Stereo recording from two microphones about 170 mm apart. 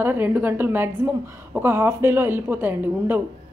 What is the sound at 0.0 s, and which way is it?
A woman's voice, 10° right (ahead or behind).